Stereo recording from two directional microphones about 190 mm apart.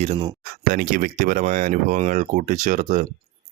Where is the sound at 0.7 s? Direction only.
50° right (ahead or behind).